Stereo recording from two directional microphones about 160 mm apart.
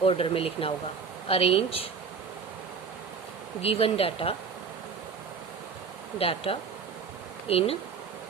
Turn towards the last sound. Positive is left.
turn(degrees=35)  # may be behind; listen again after turning